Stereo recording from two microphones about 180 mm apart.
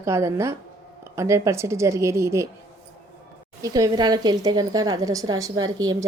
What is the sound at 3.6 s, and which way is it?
A woman's voice, 20° right (ahead or behind).